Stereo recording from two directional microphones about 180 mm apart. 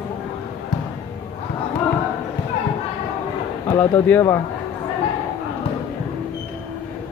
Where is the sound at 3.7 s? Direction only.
15° left (ahead or behind).